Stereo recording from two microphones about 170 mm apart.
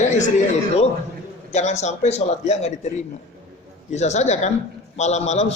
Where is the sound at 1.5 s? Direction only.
40° left (ahead or behind).